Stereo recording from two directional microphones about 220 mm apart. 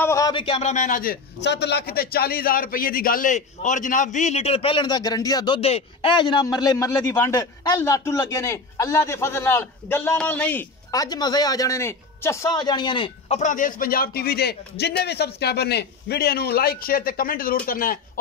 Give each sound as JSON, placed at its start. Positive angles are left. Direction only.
{"t": 0.0, "sound": "a man's voice", "side_deg": 15}
{"t": 1.4, "sound": "a man's voice", "side_deg": 50}